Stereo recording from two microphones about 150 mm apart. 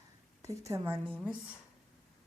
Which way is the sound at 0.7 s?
15° right (ahead or behind).